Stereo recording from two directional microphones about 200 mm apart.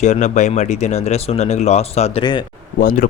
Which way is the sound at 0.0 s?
35° left (ahead or behind).